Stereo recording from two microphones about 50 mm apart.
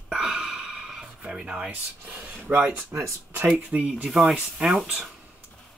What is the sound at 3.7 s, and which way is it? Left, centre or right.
Speech, right.